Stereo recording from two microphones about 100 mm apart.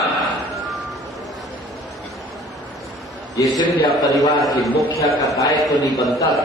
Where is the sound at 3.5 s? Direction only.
40° left (ahead or behind).